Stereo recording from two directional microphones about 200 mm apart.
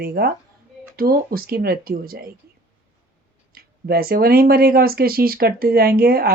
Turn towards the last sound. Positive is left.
turn(degrees=-50)  # may be behind; listen again after turning